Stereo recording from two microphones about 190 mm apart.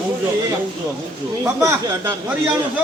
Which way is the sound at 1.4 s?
15° right (ahead or behind).